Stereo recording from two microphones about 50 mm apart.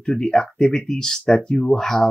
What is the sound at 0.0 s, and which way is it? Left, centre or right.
Speech, centre.